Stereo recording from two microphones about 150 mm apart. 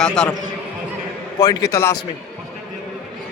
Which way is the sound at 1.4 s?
25° left (ahead or behind).